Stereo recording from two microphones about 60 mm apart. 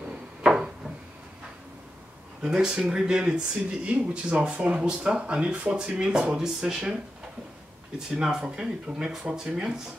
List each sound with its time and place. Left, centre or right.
0.4 s a sound: centre
2.4 s speech: centre
8.2 s speech: centre